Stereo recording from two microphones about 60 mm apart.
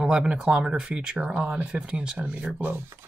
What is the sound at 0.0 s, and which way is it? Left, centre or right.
Speech, centre.